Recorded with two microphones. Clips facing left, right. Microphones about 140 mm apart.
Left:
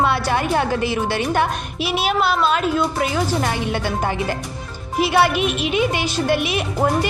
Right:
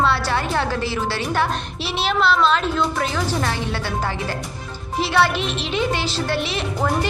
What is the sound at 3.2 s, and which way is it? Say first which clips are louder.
Speech: left 2 dB; 20° left (ahead or behind).